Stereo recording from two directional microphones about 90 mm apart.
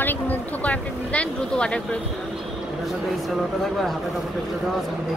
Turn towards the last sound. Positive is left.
turn(degrees=5)  # may be behind; listen again after turning